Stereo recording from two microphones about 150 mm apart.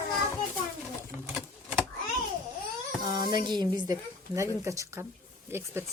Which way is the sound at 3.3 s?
30° right (ahead or behind).